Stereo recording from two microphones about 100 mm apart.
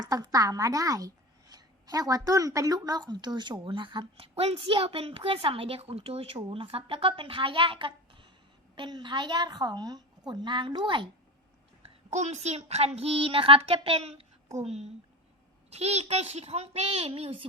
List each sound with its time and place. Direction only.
0.0 s speech: 40° right (ahead or behind)
4.4 s a woman's voice: 75° right (ahead or behind); by 8.3 s 60° right (ahead or behind)
8.7 s a woman's voice: 50° right (ahead or behind)
12.3 s a woman's voice: 90° right; by 14.3 s 70° right (ahead or behind)
14.6 s a child's voice: 90° right
17.2 s a woman's voice: 70° right (ahead or behind)